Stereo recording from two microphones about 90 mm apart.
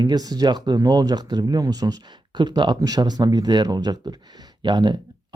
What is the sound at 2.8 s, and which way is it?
Speech, 45° right (ahead or behind).